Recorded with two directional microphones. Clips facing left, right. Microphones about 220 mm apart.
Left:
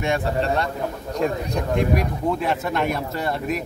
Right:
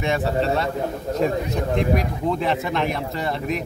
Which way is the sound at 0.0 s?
Centre (ahead or behind).